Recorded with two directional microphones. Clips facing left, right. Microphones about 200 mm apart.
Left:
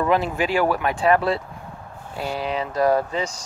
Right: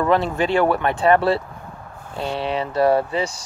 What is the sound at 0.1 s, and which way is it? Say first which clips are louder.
Speech: right 4 dB; 5° left (ahead or behind).